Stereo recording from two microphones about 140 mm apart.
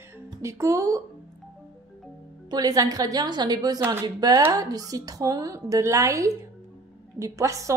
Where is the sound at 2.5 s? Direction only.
25° right (ahead or behind).